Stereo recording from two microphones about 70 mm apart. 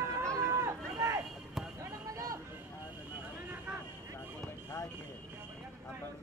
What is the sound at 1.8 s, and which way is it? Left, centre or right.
Basketball bounce, right.